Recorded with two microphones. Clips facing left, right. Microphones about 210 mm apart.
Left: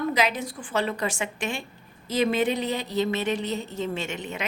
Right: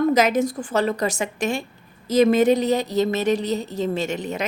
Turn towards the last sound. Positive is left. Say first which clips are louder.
# right 6 dB
turn(degrees=-40)  # may be behind; listen again after turning